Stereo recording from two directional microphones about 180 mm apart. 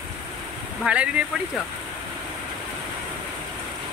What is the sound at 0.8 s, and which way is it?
Speech, 5° right (ahead or behind).